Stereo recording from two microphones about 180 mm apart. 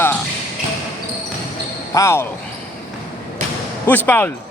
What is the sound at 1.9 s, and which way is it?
Speech, 15° left (ahead or behind).